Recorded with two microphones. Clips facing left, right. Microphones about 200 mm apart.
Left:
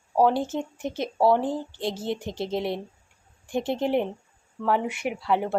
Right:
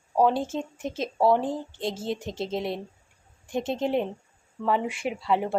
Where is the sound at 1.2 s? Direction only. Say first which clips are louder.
Left 1 dB; 5° left (ahead or behind).